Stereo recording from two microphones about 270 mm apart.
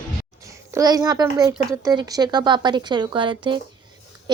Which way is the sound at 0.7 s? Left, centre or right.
Centre.